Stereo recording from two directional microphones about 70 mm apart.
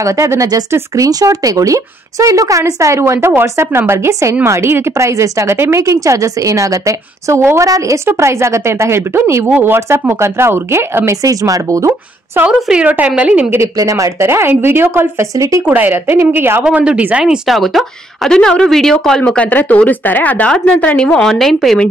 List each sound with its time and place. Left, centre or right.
0.0 s a woman's voice: right
4.1 s a woman's voice: right
8.1 s speech: right
11.2 s a woman's voice: right
12.4 s a woman's voice: centre
13.7 s speech: right
15.3 s a woman's voice: right
15.6 s a woman's voice: right
16.7 s speech: centre
17.5 s speech: centre
19.2 s speech: centre